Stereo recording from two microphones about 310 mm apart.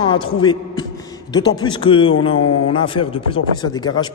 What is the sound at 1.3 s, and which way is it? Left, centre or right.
Speech, centre.